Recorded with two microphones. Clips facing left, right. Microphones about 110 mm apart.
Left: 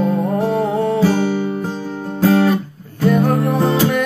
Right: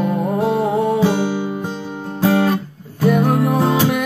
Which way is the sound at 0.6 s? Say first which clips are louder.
Even; 10° right (ahead or behind).